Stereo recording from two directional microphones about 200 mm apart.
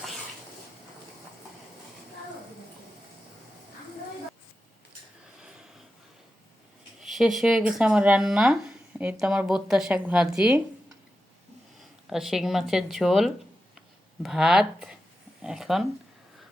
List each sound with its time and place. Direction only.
5.4 s a sound: 5° right (ahead or behind)
7.0 s speech: centre (ahead or behind)
12.0 s speech: centre (ahead or behind)